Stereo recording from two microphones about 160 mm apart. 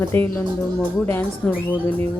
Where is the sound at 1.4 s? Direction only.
15° left (ahead or behind).